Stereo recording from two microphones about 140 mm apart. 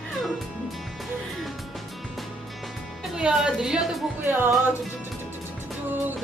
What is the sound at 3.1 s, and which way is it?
Speech, 5° right (ahead or behind).